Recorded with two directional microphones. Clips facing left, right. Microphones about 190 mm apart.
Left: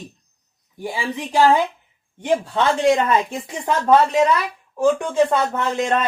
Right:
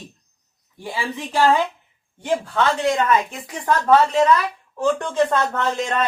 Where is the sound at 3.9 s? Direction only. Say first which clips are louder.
Even; 15° left (ahead or behind).